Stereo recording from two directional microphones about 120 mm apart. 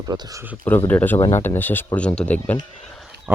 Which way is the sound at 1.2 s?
65° left (ahead or behind).